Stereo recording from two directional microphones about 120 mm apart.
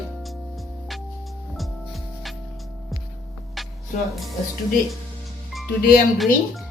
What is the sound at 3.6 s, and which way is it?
Music, centre (ahead or behind).